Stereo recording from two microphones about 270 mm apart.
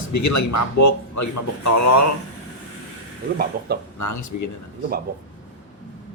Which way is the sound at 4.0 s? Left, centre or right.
Left.